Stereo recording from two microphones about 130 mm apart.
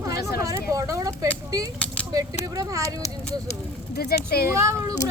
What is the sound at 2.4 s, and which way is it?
Speech, 25° right (ahead or behind).